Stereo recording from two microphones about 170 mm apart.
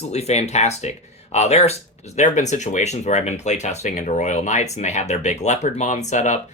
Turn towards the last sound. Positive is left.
turn(degrees=45)  # may be behind; listen again after turning